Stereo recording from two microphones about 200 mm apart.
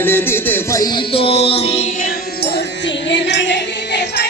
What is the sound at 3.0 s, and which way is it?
Music, 60° left (ahead or behind).